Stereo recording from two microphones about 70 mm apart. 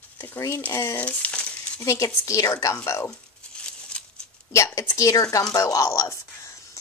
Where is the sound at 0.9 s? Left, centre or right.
Centre.